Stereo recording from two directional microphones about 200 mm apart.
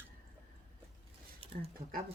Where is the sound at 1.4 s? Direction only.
25° right (ahead or behind).